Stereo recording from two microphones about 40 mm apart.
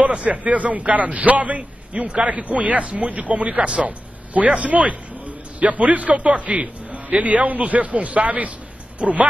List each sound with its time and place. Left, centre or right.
0.0 s a man's voice: right